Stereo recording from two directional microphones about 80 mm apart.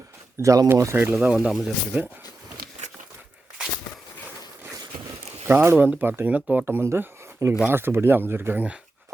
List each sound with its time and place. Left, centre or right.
0.3 s speech: right
0.9 s speech: right
1.2 s speech: centre
1.9 s speech: right
5.5 s speech: right